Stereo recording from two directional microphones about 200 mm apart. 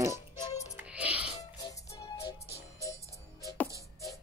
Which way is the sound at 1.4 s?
20° left (ahead or behind).